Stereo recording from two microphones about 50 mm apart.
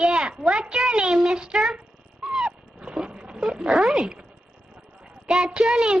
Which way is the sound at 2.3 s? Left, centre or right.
Centre.